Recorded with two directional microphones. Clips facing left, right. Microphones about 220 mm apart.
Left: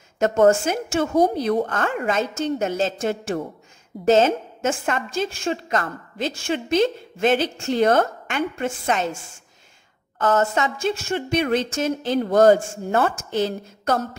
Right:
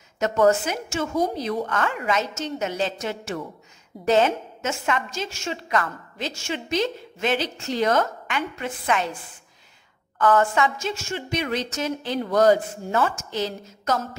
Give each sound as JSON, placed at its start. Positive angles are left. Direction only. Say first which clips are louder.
{"t": 0.5, "sound": "a woman's voice", "louder": "left 3 dB", "side_deg": 50}